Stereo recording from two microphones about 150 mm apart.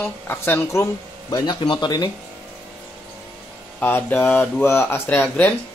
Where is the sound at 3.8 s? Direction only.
15° left (ahead or behind).